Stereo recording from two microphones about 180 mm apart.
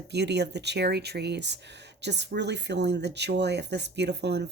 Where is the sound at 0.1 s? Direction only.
70° right (ahead or behind).